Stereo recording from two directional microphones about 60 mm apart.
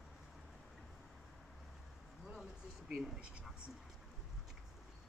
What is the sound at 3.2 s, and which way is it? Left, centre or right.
Speech, centre.